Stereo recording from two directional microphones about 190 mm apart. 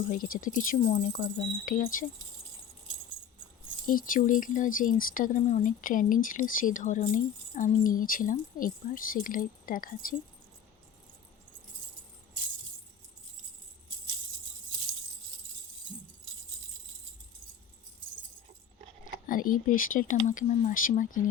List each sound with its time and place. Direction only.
0.4 s speech: 45° left (ahead or behind)
3.8 s speech: 45° left (ahead or behind)
19.3 s speech: 45° left (ahead or behind)